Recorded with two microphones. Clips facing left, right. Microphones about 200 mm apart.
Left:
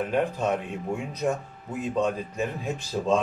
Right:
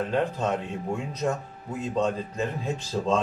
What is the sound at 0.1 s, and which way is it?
A man's voice, 15° left (ahead or behind).